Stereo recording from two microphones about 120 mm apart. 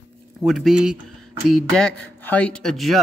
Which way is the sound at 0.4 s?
Centre (ahead or behind).